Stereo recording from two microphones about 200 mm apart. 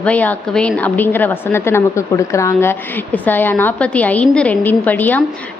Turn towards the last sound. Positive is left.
turn(degrees=10)  # may be behind; listen again after turning